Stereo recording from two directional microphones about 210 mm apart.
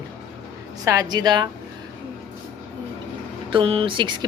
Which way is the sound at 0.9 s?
20° right (ahead or behind).